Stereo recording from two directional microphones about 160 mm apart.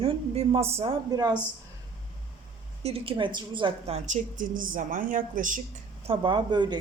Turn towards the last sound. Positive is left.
turn(degrees=-25)  # may be behind; listen again after turning